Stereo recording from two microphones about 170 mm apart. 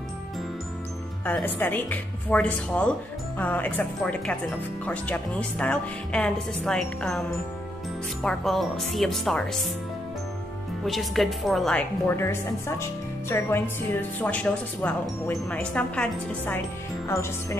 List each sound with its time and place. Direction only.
1.2 s a woman's voice: 10° left (ahead or behind)
10.9 s a woman's voice: centre (ahead or behind); by 17.6 s 15° left (ahead or behind)